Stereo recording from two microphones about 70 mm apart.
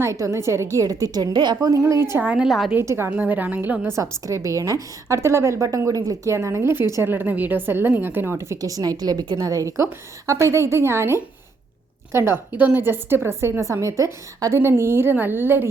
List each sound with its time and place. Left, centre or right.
0.0 s a woman's voice: right
1.7 s a woman's voice: right
2.2 s a woman's voice: centre
2.5 s a woman's voice: centre
2.7 s a woman's voice: right
3.1 s a woman's voice: right
3.8 s a woman's voice: right
12.5 s a woman's voice: right
14.6 s a woman's voice: right